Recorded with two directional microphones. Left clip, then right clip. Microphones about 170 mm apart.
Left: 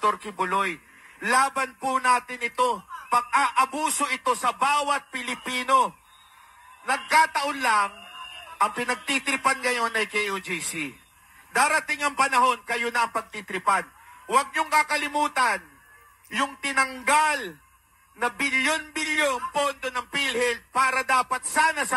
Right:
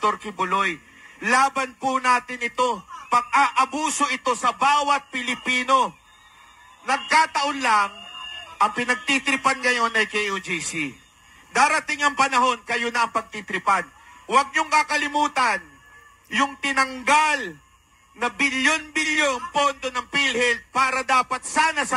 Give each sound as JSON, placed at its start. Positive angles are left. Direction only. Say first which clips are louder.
{"t": 0.0, "sound": "a man's voice", "louder": "right 2 dB", "side_deg": -30}